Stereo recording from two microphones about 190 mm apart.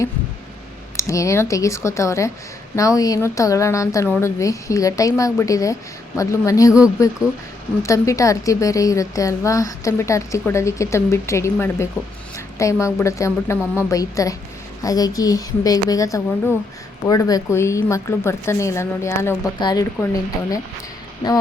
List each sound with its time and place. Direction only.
0.9 s a woman's voice: 15° left (ahead or behind)